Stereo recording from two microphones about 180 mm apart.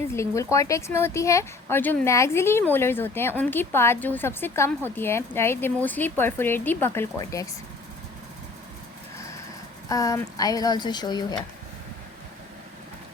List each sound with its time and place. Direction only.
0.1 s a woman's voice: 15° left (ahead or behind)
9.9 s speech: 20° left (ahead or behind)